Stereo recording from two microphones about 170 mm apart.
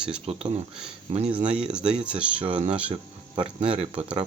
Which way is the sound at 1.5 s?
5° right (ahead or behind).